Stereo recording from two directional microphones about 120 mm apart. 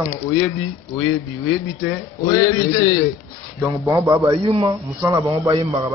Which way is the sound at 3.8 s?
25° right (ahead or behind).